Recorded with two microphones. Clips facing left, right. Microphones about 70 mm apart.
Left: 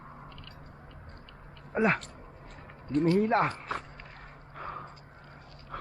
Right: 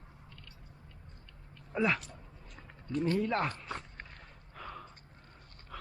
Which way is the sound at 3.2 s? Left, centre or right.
Left.